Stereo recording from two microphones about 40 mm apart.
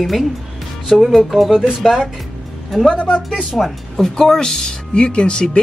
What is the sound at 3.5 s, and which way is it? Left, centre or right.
Speech, centre.